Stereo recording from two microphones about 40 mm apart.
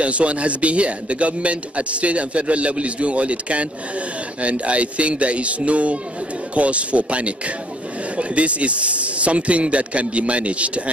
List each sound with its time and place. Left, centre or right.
0.0 s speech: right